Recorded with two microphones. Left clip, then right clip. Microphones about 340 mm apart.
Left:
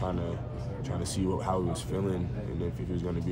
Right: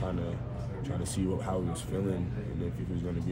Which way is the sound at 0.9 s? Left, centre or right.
Centre.